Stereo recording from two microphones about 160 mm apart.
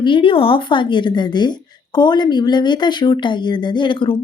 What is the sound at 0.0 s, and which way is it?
A woman's voice, 30° left (ahead or behind).